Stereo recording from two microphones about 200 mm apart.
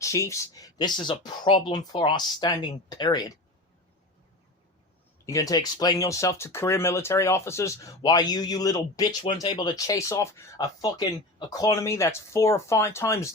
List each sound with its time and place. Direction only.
0.0 s speech: 15° left (ahead or behind)
5.2 s speech: 15° left (ahead or behind)